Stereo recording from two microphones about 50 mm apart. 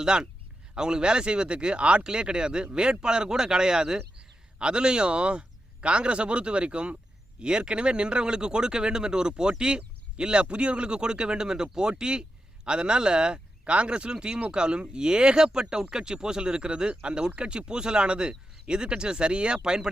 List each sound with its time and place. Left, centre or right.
0.0 s speech: centre